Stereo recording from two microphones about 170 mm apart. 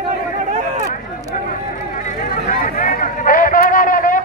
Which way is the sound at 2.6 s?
50° left (ahead or behind).